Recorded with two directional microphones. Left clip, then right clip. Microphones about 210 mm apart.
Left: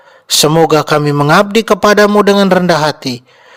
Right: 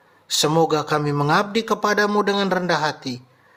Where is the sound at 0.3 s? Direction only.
40° left (ahead or behind).